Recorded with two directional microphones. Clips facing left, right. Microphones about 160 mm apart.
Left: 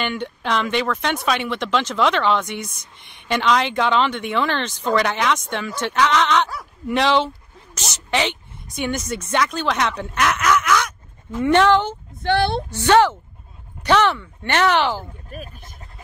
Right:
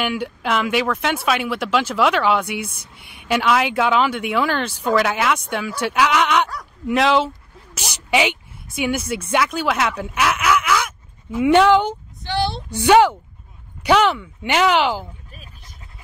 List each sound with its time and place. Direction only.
0.0 s speech: 5° right (ahead or behind)
12.2 s speech: 55° left (ahead or behind)
12.6 s speech: 10° right (ahead or behind)
15.3 s speech: 50° left (ahead or behind)